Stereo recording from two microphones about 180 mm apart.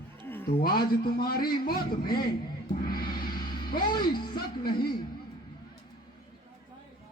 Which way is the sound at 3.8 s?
55° left (ahead or behind).